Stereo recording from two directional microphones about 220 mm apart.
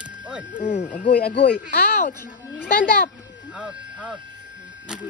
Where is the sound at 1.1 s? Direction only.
45° left (ahead or behind).